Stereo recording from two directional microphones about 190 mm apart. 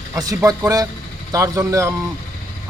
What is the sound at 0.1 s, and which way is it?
A man's voice, 20° right (ahead or behind).